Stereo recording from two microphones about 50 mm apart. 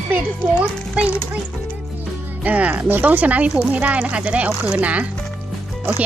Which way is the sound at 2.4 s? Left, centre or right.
Right.